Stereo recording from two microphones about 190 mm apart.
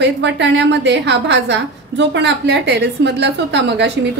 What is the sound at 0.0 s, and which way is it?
A woman's voice, 70° right (ahead or behind).